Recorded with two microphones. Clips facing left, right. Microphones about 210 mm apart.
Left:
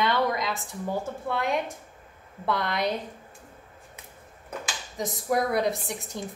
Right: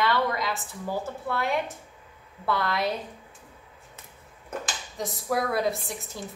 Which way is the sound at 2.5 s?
20° left (ahead or behind).